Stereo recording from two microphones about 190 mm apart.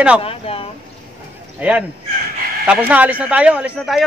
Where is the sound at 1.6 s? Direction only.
10° right (ahead or behind).